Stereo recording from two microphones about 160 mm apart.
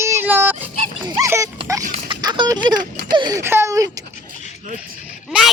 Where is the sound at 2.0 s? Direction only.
30° right (ahead or behind).